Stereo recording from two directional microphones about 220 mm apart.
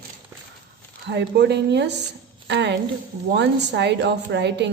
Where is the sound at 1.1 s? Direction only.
50° right (ahead or behind).